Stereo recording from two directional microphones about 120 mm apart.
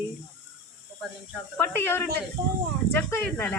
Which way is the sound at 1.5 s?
20° left (ahead or behind).